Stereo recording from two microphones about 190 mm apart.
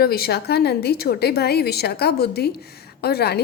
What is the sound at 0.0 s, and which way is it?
Speech, 55° left (ahead or behind).